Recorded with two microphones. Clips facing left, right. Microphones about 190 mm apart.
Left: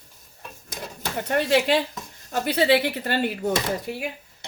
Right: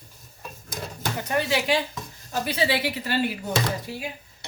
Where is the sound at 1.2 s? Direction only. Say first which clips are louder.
Left 4 dB; 60° left (ahead or behind).